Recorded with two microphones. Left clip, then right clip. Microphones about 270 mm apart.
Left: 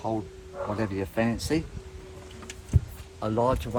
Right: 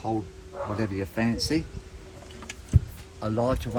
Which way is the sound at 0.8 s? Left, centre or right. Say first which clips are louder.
Left 2 dB; left.